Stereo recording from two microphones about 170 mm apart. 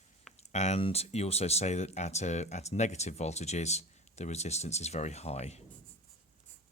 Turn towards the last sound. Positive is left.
turn(degrees=40)  # may be behind; listen again after turning